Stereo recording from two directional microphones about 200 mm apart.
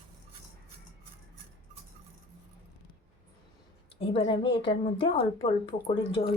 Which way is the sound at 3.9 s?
30° left (ahead or behind).